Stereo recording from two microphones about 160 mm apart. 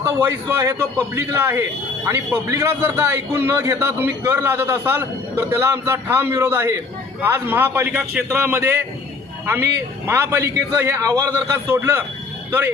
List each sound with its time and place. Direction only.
0.0 s a man's voice: 15° right (ahead or behind)